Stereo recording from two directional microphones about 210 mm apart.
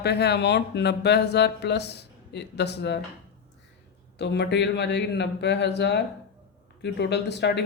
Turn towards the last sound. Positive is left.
turn(degrees=55)  # may be behind; listen again after turning